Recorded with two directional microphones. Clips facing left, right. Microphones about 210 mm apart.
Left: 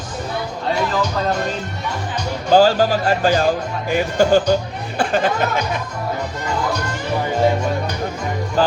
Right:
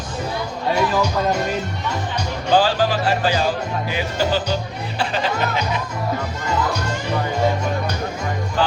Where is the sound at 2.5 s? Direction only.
45° left (ahead or behind).